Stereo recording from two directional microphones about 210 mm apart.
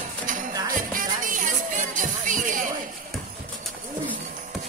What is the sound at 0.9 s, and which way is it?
Music, 40° right (ahead or behind).